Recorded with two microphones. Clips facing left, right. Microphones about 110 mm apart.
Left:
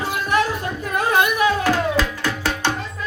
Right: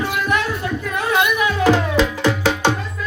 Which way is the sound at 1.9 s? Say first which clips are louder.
Right 5 dB; 20° right (ahead or behind).